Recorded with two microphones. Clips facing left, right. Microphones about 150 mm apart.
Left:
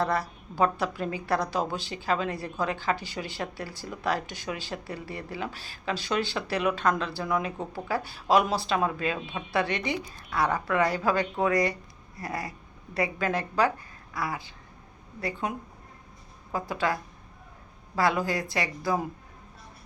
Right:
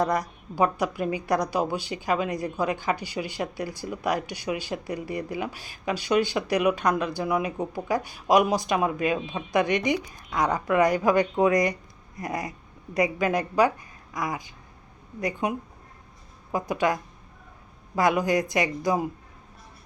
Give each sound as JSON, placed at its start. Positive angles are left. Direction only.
{"t": 0.0, "sound": "a woman's voice", "side_deg": -15}